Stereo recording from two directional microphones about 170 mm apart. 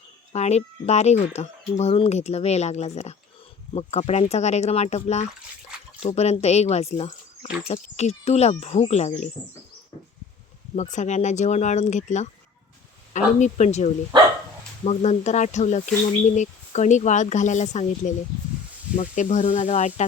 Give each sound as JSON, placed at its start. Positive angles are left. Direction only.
{"t": 0.3, "sound": "speech", "side_deg": 40}
{"t": 10.9, "sound": "speech", "side_deg": 45}
{"t": 14.1, "sound": "speech", "side_deg": -25}
{"t": 14.8, "sound": "speech", "side_deg": 40}